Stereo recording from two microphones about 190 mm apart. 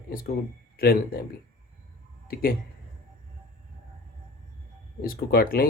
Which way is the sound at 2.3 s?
50° left (ahead or behind).